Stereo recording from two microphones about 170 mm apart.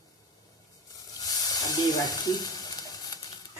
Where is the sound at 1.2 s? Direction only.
20° left (ahead or behind).